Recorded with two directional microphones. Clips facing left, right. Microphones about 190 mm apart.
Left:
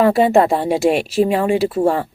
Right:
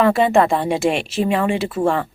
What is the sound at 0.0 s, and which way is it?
Speech, 40° left (ahead or behind).